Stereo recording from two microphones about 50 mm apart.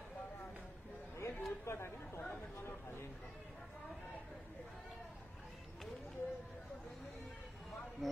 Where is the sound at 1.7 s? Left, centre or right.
Left.